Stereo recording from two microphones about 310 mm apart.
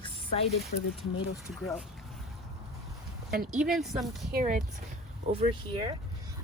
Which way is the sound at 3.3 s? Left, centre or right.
Right.